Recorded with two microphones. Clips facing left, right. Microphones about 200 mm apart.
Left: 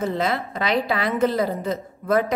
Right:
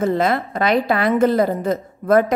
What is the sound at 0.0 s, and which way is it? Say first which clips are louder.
A woman's voice: right 5 dB; 50° right (ahead or behind).